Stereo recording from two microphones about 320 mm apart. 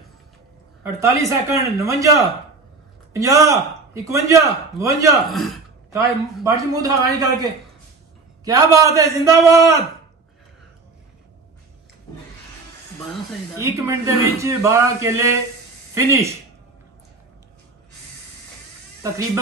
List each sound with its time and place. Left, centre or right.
0.9 s speech: centre
3.1 s speech: centre
8.5 s speech: centre
13.6 s speech: centre
19.0 s speech: centre